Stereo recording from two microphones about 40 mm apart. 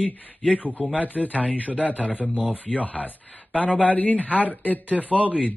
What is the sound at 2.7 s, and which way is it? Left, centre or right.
Speech, left.